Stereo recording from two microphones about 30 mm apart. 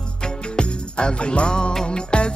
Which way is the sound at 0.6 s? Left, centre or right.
Left.